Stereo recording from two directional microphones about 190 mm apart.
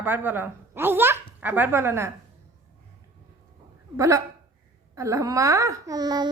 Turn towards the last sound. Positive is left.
turn(degrees=-20)  # may be behind; listen again after turning